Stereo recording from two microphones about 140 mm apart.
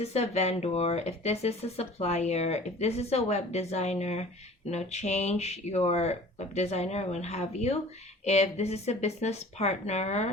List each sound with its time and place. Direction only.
0.0 s speech: 50° left (ahead or behind)